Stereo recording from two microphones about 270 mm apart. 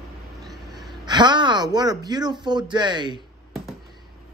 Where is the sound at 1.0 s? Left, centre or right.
Centre.